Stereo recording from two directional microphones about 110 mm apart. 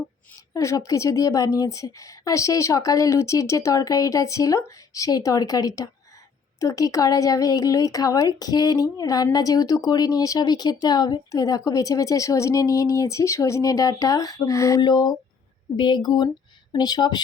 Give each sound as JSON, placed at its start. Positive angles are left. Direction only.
{"t": 0.5, "sound": "a woman's voice", "side_deg": 30}
{"t": 14.8, "sound": "a woman's voice", "side_deg": 40}